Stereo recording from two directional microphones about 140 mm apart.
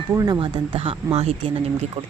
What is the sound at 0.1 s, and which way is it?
Speech, 25° right (ahead or behind).